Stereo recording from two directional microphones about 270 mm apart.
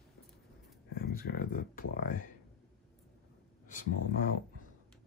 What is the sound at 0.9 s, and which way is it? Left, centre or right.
Speech, left.